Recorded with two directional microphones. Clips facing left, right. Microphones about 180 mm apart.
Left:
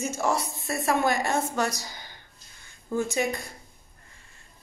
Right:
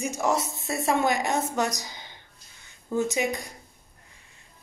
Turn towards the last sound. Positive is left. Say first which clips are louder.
# right 1 dB
turn(degrees=-20)  # may be behind; listen again after turning